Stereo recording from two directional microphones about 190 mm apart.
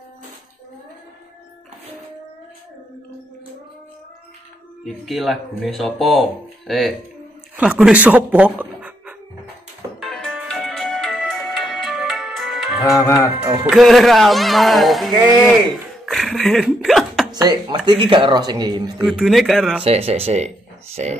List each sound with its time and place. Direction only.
4.8 s speech: centre (ahead or behind)
7.5 s speech: 5° right (ahead or behind)
9.9 s music: centre (ahead or behind)
13.7 s speech: centre (ahead or behind)
15.4 s a sound: centre (ahead or behind)
17.3 s speech: 20° right (ahead or behind)
19.0 s speech: centre (ahead or behind)
19.8 s speech: 30° right (ahead or behind)